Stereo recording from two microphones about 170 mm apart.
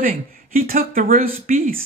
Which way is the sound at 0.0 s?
55° right (ahead or behind).